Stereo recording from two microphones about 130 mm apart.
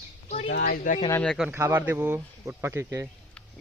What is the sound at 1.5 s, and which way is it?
Speech, 20° right (ahead or behind).